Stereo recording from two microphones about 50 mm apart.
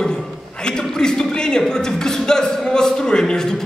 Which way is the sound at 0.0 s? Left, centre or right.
Centre.